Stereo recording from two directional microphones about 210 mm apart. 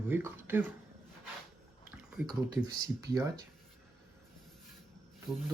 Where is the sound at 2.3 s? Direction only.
20° right (ahead or behind).